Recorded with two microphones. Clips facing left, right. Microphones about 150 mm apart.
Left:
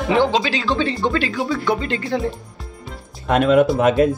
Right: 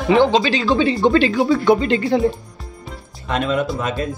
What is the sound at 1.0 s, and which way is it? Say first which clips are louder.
Speech: right 6 dB; 25° right (ahead or behind).